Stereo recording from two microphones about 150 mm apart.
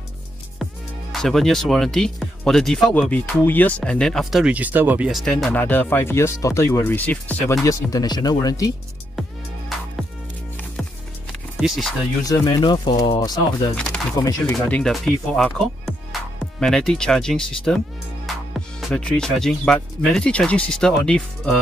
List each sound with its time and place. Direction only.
1.1 s speech: centre (ahead or behind)
5.2 s speech: 5° left (ahead or behind)
7.6 s speech: 25° left (ahead or behind)
9.7 s music: centre (ahead or behind)
11.5 s speech: centre (ahead or behind)
12.3 s speech: 30° left (ahead or behind)
13.7 s speech: 5° left (ahead or behind)
14.1 s speech: 25° left (ahead or behind)
14.7 s speech: centre (ahead or behind)